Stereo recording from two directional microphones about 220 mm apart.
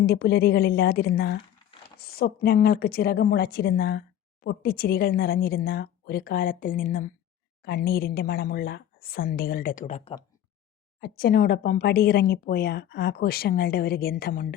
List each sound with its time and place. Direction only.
0.0 s a woman's voice: 45° left (ahead or behind); by 10.2 s 30° left (ahead or behind)
11.2 s a woman's voice: 40° left (ahead or behind)